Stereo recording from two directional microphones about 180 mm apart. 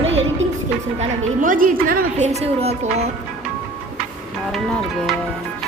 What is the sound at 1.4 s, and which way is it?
A woman's voice, 50° right (ahead or behind).